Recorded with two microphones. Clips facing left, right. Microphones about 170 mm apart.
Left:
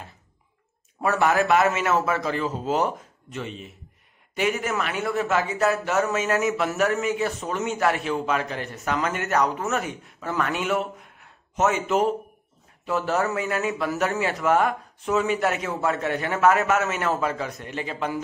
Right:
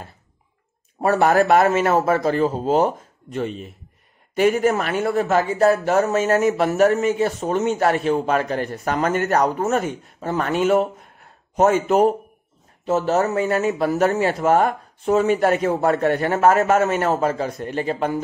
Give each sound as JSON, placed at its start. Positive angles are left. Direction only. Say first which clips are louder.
{"t": 1.0, "sound": "a man's voice", "louder": "right 5 dB", "side_deg": -35}
{"t": 1.4, "sound": "a man's voice", "louder": "right 5 dB", "side_deg": -50}
{"t": 2.6, "sound": "a man's voice", "louder": "right 5 dB", "side_deg": -30}
{"t": 3.3, "sound": "a man's voice", "louder": "right 8 dB", "side_deg": -45}